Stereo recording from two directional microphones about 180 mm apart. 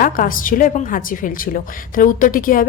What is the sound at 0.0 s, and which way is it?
A woman's voice, 50° left (ahead or behind).